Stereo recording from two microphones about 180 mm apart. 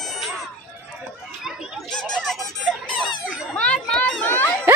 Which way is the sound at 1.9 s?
5° left (ahead or behind).